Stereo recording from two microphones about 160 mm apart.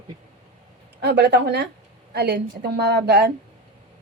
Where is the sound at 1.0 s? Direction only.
90° right.